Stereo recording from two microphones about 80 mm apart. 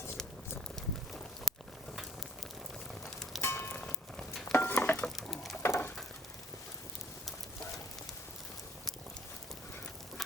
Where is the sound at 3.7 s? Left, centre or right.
Centre.